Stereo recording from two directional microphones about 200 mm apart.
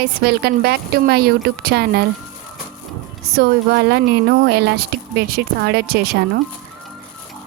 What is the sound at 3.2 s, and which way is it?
Speech, 50° right (ahead or behind).